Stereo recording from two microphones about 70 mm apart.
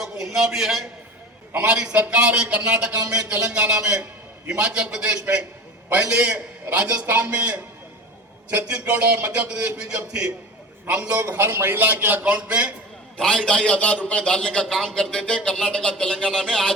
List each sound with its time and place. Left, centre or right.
0.0 s a man's voice: centre
11.1 s a man's voice: right; by 12.7 s centre
13.1 s speech: centre